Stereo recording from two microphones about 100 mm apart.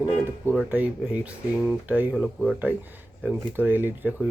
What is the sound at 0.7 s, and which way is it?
Speech, 15° right (ahead or behind).